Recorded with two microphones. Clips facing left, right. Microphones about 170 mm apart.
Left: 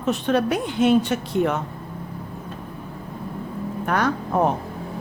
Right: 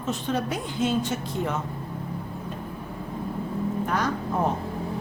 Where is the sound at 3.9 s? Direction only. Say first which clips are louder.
Left 8 dB; 65° left (ahead or behind).